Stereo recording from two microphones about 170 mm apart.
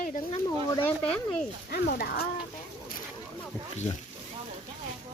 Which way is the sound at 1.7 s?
60° left (ahead or behind).